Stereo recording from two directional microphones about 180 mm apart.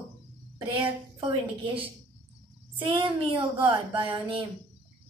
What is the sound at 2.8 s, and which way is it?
A woman's voice, 30° right (ahead or behind).